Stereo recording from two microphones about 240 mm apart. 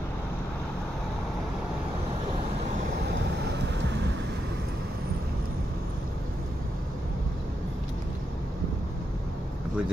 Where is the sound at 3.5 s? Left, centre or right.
Right.